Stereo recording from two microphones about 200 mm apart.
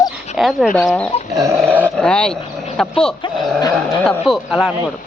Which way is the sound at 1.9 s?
5° left (ahead or behind).